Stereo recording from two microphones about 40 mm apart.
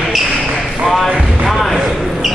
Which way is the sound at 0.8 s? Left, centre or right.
Centre.